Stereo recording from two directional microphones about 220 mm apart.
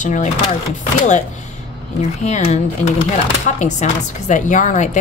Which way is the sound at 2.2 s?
30° left (ahead or behind).